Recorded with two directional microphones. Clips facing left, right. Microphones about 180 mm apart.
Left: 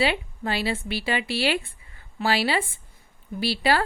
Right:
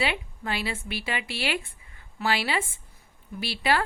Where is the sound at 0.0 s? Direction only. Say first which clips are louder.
Left 5 dB; 30° left (ahead or behind).